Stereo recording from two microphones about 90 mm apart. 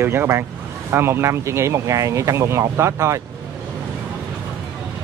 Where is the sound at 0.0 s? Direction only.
25° right (ahead or behind).